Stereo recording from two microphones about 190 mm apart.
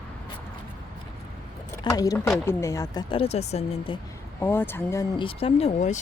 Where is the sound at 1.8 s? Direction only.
20° left (ahead or behind).